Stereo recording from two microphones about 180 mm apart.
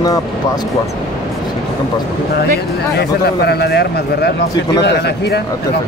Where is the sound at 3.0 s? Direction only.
65° left (ahead or behind).